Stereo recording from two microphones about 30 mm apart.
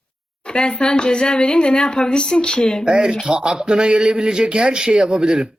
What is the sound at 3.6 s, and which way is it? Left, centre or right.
A man's voice, right.